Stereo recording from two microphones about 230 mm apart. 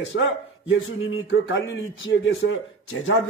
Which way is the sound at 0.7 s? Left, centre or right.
Left.